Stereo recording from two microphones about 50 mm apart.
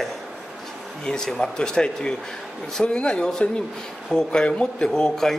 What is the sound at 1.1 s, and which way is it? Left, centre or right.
A man's voice, centre.